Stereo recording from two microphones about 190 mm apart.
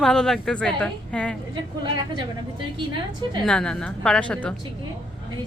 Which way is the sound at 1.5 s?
25° right (ahead or behind).